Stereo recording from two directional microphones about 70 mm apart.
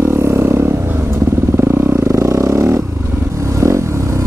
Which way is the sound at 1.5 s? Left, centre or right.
Right.